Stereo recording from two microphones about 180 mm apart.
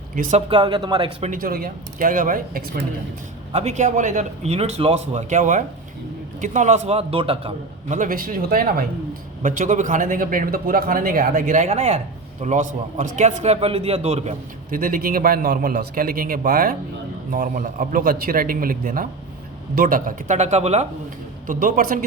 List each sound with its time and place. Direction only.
0.2 s a man's voice: 40° right (ahead or behind)
0.5 s speech: 25° right (ahead or behind)
1.3 s a man's voice: 55° right (ahead or behind)
3.5 s a man's voice: 40° right (ahead or behind)
21.4 s a man's voice: 50° right (ahead or behind)